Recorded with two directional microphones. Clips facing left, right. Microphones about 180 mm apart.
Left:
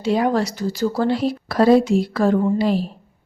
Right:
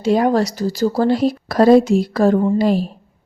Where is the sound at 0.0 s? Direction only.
45° right (ahead or behind).